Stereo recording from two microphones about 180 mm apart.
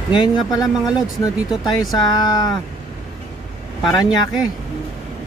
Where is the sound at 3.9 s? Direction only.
25° left (ahead or behind).